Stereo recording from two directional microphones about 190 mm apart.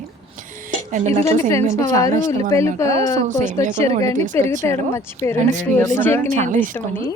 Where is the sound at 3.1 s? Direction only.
40° right (ahead or behind).